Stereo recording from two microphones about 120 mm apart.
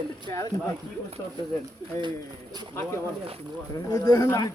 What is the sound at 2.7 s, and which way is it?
Speech, 20° left (ahead or behind).